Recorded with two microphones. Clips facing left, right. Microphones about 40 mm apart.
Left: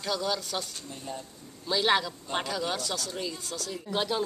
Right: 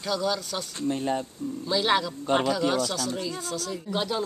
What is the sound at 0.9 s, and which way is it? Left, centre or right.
Speech, right.